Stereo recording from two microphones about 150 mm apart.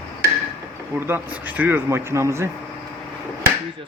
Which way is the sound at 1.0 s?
15° right (ahead or behind).